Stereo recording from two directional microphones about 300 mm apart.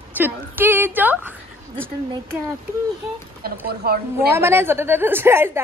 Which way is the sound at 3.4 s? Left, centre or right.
Right.